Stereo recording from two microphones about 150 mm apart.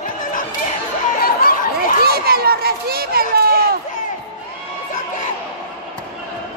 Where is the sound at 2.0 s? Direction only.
90° right.